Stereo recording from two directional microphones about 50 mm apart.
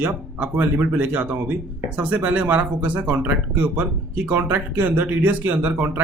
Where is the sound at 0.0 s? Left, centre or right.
Right.